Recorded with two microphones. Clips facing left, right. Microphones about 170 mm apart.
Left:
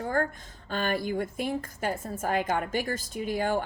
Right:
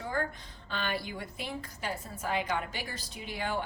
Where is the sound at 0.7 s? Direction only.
45° left (ahead or behind).